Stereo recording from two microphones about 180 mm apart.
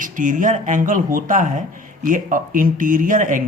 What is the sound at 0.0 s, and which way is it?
Speech, 45° right (ahead or behind).